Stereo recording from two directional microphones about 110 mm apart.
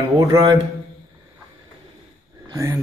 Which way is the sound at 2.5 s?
30° right (ahead or behind).